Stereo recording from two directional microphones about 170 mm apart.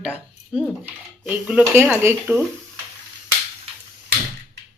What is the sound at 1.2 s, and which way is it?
Speech, 5° right (ahead or behind).